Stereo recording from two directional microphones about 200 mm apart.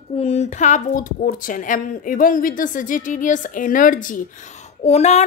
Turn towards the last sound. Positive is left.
turn(degrees=35)  # may be behind; listen again after turning